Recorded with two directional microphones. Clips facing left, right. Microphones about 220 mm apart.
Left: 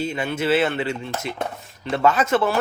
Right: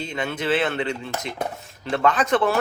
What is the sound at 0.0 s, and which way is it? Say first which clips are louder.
Speech: left 3 dB; 5° left (ahead or behind).